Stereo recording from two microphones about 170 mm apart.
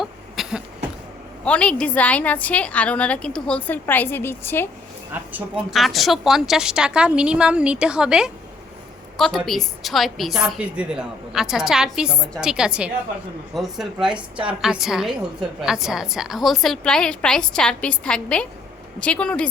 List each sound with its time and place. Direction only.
0.0 s cough: centre (ahead or behind)
1.5 s a woman's voice: 5° left (ahead or behind)
5.3 s a woman's voice: 5° right (ahead or behind)